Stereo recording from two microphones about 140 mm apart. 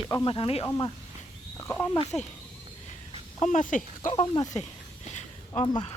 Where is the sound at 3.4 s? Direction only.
65° left (ahead or behind).